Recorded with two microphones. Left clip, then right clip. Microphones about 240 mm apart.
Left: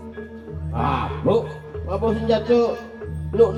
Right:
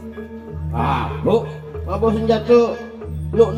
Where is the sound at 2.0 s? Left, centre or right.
Right.